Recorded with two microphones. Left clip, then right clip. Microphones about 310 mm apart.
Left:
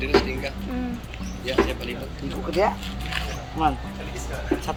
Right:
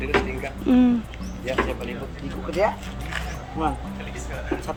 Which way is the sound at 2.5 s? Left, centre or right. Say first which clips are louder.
Even; centre.